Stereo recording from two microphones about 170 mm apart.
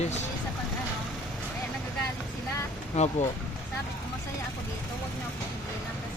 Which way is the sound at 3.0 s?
45° left (ahead or behind).